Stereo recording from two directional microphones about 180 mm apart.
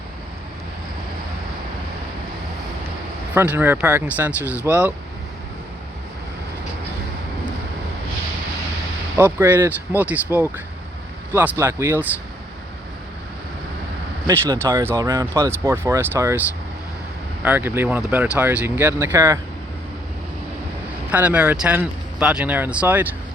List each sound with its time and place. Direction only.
3.3 s speech: 10° right (ahead or behind)
9.1 s speech: 15° right (ahead or behind)
14.3 s speech: 15° right (ahead or behind)
17.4 s speech: 10° right (ahead or behind)
21.1 s speech: 10° right (ahead or behind)